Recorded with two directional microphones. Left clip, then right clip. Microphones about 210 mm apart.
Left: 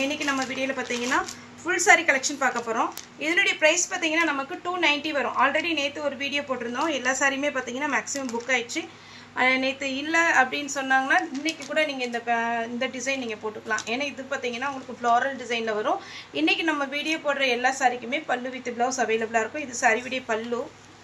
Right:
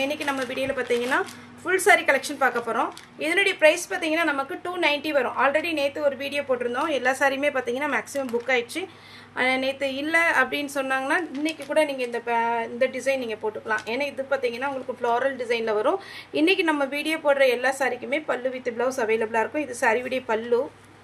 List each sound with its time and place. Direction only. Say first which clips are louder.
0.0 s a woman's voice: even; 60° right (ahead or behind)